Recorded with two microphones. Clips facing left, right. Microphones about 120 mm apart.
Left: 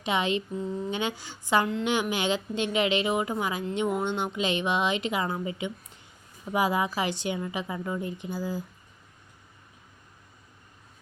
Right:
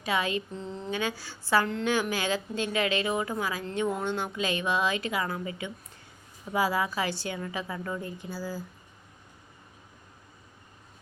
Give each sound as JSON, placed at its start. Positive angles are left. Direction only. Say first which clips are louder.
{"t": 0.0, "sound": "a woman's voice", "louder": "left 2 dB", "side_deg": 20}
{"t": 0.5, "sound": "speech", "louder": "left 6 dB", "side_deg": 10}
{"t": 0.9, "sound": "a woman's voice", "louder": "left 1 dB", "side_deg": 20}